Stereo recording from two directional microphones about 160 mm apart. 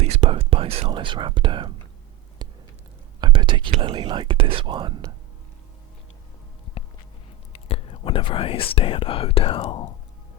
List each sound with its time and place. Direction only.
0.0 s whispering: 40° right (ahead or behind)
2.4 s a sound: 25° right (ahead or behind)
3.2 s whispering: 30° right (ahead or behind)
3.7 s speech: 35° right (ahead or behind)
7.5 s speech: 35° left (ahead or behind)